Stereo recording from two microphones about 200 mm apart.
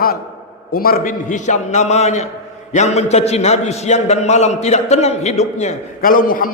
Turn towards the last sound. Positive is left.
turn(degrees=45)  # may be behind; listen again after turning